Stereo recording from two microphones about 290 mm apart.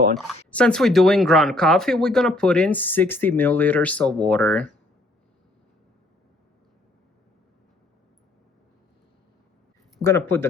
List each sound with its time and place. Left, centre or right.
0.2 s speech: centre
10.0 s speech: centre